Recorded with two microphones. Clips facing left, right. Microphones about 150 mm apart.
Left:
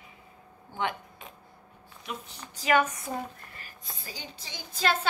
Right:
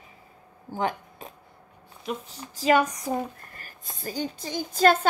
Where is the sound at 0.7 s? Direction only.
40° right (ahead or behind).